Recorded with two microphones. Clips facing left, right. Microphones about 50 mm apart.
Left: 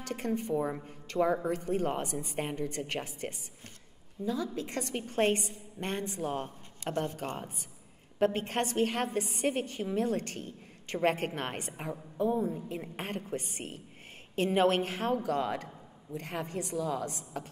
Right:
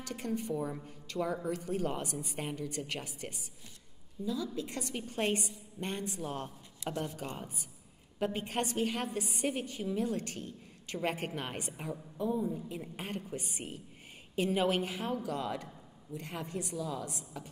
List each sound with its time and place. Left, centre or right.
0.1 s speech: left
4.2 s speech: left
6.8 s speech: left
11.7 s a woman's voice: left
12.2 s speech: left
12.5 s a woman's voice: left